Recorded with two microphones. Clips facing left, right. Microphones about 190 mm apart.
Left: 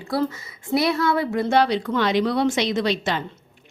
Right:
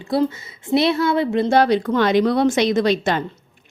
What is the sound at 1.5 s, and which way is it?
A woman's voice, 50° right (ahead or behind).